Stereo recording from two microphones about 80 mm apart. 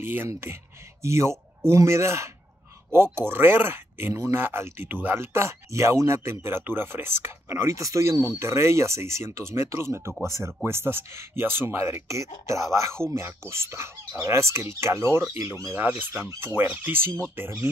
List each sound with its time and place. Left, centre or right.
0.0 s speech: right
15.6 s speech: right